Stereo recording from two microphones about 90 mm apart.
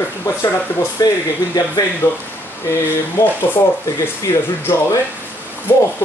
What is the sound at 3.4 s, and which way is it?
Speech, 25° left (ahead or behind).